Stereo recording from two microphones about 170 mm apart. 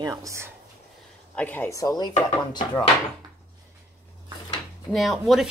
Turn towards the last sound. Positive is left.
turn(degrees=0)  # may be behind; listen again after turning